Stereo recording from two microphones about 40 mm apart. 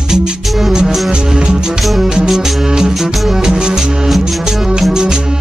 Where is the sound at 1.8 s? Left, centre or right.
Centre.